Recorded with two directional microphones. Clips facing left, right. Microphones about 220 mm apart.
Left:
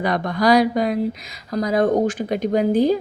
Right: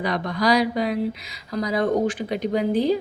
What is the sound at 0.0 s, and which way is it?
A woman's voice, 50° left (ahead or behind).